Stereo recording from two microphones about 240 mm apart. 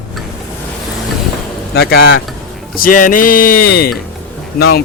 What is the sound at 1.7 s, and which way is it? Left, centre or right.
Speech, left.